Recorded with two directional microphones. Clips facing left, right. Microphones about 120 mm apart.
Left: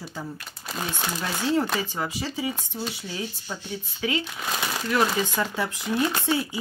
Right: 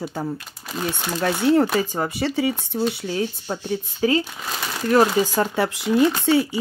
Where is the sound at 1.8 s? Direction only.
50° right (ahead or behind); by 2.5 s 65° right (ahead or behind).